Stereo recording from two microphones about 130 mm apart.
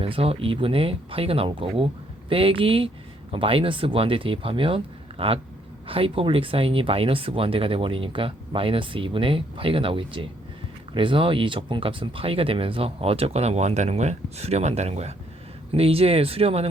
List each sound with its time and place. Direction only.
0.0 s speech: 45° right (ahead or behind)